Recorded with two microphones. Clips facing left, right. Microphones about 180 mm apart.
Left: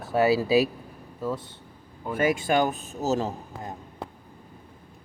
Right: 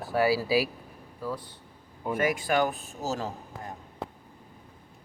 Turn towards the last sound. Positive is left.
turn(degrees=20)  # may be behind; listen again after turning